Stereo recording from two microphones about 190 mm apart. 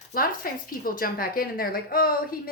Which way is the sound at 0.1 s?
50° left (ahead or behind).